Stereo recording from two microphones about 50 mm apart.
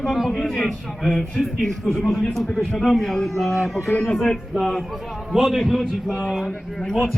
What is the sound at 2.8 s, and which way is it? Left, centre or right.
Speech, centre.